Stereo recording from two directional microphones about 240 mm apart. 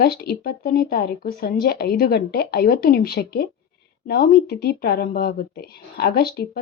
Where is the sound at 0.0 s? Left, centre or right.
Left.